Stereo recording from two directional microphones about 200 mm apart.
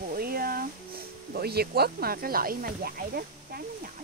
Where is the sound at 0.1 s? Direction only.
45° right (ahead or behind).